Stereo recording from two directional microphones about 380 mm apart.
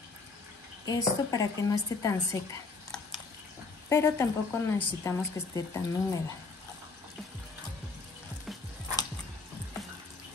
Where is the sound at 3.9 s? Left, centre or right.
Centre.